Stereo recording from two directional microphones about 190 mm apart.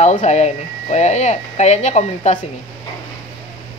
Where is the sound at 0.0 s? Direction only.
40° left (ahead or behind).